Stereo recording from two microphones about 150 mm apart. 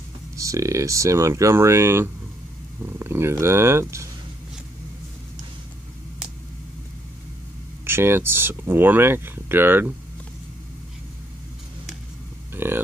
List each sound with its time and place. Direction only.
0.4 s speech: 20° right (ahead or behind)
7.8 s speech: 15° right (ahead or behind)
12.5 s speech: 15° right (ahead or behind)